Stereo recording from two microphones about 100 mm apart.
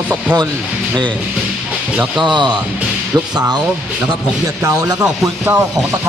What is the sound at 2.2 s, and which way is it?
Speech, 50° right (ahead or behind).